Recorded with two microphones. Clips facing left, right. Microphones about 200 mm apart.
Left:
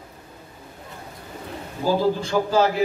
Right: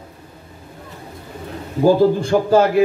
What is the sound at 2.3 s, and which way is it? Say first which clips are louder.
Speech: right 5 dB; 50° right (ahead or behind).